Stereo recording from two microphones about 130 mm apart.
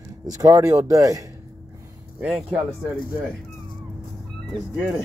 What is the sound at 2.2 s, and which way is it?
Speech, 10° right (ahead or behind).